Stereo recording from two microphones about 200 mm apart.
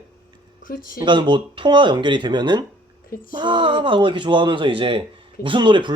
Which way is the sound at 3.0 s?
45° left (ahead or behind).